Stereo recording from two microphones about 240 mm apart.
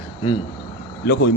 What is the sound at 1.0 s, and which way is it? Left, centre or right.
Speech, left.